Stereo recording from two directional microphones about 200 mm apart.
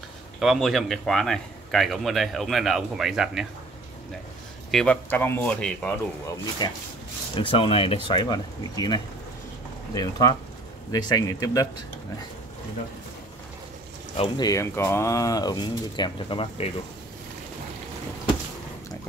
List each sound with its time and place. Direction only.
0.4 s speech: centre (ahead or behind)
4.6 s speech: 5° left (ahead or behind)
6.6 s speech: 20° left (ahead or behind)
14.1 s speech: 25° left (ahead or behind)